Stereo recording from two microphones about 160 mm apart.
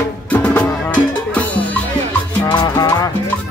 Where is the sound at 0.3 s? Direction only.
10° left (ahead or behind).